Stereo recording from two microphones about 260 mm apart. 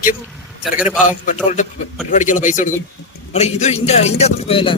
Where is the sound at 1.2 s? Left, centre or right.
Left.